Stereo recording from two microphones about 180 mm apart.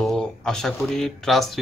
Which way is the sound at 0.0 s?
Centre (ahead or behind).